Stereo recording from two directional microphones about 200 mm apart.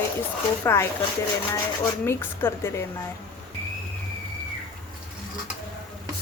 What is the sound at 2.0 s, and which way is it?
Speech, 10° left (ahead or behind).